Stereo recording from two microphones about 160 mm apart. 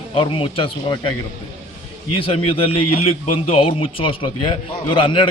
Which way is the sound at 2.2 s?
35° left (ahead or behind).